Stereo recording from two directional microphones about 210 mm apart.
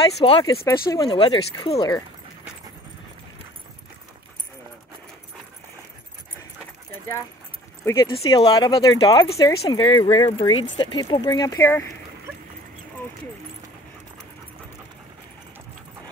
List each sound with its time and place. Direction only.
0.2 s speech: 20° left (ahead or behind)
7.8 s speech: 15° left (ahead or behind)